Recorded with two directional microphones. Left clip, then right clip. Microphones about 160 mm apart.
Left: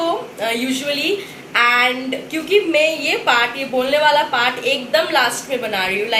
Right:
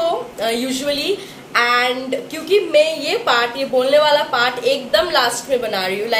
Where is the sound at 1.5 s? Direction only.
15° right (ahead or behind).